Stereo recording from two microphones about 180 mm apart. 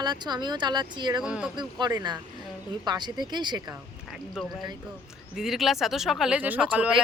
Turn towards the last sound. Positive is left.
turn(degrees=-10)  # may be behind; listen again after turning